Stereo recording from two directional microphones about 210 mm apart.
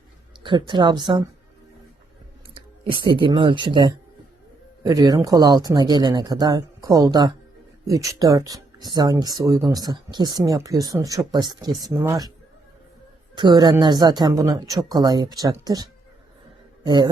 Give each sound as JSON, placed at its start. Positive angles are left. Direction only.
{"t": 0.4, "sound": "a woman's voice", "side_deg": -20}
{"t": 2.9, "sound": "a woman's voice", "side_deg": -25}
{"t": 13.3, "sound": "a woman's voice", "side_deg": -20}